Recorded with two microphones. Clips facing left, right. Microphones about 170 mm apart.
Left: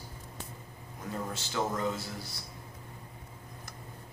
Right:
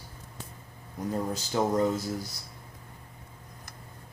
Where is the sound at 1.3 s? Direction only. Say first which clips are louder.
Right 7 dB; 40° right (ahead or behind).